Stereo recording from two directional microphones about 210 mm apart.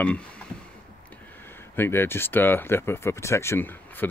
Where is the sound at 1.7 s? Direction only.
10° left (ahead or behind).